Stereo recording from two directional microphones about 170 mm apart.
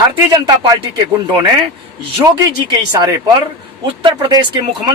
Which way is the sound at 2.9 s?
25° right (ahead or behind).